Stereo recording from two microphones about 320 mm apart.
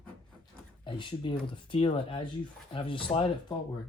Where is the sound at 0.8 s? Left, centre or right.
Centre.